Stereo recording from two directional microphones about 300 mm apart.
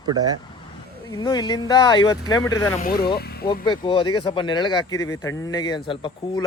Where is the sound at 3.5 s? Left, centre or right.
Centre.